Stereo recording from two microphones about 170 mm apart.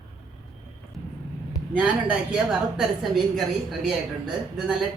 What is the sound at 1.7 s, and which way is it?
A woman's voice, 5° right (ahead or behind).